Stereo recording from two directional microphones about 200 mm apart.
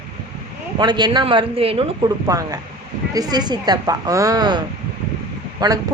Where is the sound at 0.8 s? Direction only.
20° right (ahead or behind).